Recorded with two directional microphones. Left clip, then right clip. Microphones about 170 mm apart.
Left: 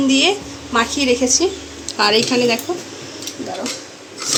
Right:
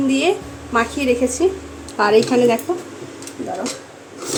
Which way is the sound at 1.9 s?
10° right (ahead or behind).